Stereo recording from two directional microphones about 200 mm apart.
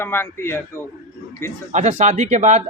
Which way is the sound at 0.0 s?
10° left (ahead or behind).